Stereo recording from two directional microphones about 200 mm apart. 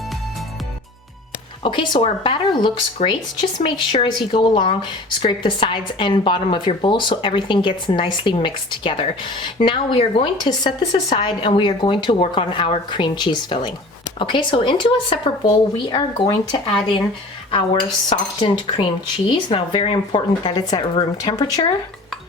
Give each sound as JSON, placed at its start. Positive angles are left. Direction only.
{"t": 1.6, "sound": "speech", "side_deg": 25}
{"t": 18.1, "sound": "speech", "side_deg": 25}